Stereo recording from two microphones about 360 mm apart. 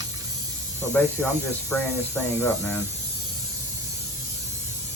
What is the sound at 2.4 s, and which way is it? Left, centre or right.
Speech, centre.